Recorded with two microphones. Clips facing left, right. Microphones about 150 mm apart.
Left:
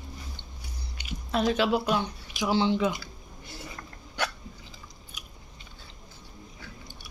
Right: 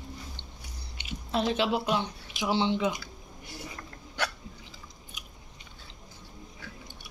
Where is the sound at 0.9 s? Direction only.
25° right (ahead or behind).